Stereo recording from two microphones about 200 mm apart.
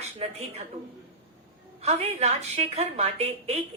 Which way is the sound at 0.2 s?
30° right (ahead or behind).